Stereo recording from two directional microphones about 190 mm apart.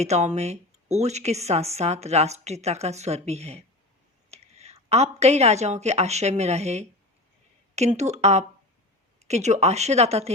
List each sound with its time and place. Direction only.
0.0 s a woman's voice: 35° right (ahead or behind)